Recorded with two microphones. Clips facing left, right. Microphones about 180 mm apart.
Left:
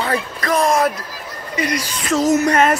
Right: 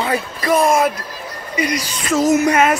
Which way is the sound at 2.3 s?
5° right (ahead or behind).